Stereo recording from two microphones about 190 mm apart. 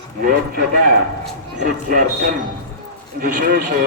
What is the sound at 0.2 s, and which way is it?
Speech, 50° right (ahead or behind).